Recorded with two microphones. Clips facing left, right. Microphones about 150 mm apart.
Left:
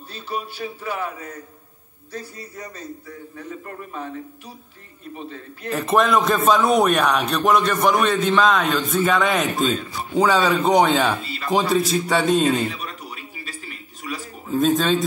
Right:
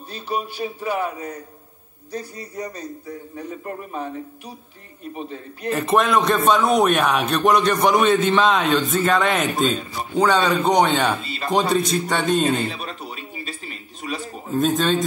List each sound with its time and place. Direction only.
0.1 s speech: 15° right (ahead or behind)
5.1 s speech: 20° right (ahead or behind)
5.7 s a man's voice: centre (ahead or behind)
11.2 s speech: 25° right (ahead or behind)
11.7 s a man's voice: centre (ahead or behind)
12.6 s a sound: 30° right (ahead or behind)
14.5 s a man's voice: centre (ahead or behind)